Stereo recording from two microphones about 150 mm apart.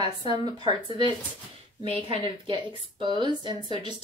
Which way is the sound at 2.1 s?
35° right (ahead or behind).